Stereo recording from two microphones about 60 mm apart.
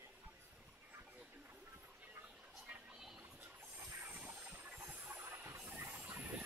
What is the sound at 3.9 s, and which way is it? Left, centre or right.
Train, right.